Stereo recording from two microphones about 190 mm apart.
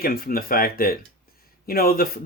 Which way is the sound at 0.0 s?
50° left (ahead or behind).